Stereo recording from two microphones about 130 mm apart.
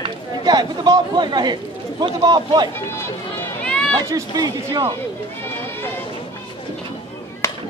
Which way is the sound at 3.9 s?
30° right (ahead or behind).